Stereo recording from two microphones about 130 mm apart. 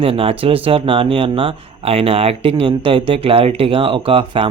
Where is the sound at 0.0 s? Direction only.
45° right (ahead or behind).